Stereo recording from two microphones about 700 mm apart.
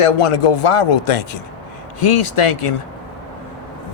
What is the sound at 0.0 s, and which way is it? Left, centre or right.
Speech, left.